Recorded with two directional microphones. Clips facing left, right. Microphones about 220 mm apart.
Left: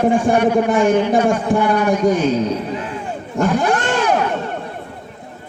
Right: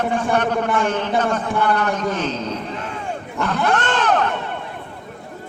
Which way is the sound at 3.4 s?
10° left (ahead or behind).